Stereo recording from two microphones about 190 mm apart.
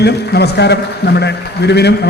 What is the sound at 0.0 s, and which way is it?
A man's voice, 60° left (ahead or behind).